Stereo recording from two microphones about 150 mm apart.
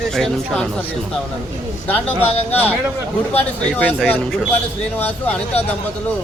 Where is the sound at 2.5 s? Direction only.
10° left (ahead or behind).